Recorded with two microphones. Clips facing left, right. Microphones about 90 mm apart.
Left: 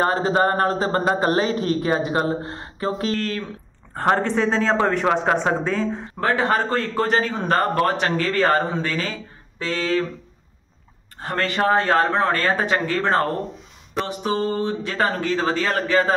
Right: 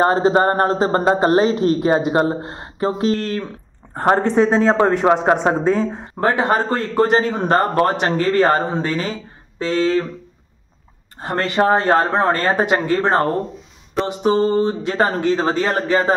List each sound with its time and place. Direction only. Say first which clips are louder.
0.0 s a man's voice: right 4 dB; 25° right (ahead or behind)
11.1 s speech: right 4 dB; 20° right (ahead or behind)